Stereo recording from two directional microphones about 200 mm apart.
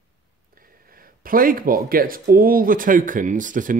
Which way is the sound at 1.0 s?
45° right (ahead or behind).